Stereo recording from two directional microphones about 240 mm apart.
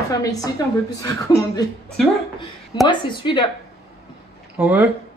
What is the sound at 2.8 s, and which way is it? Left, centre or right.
Speech, centre.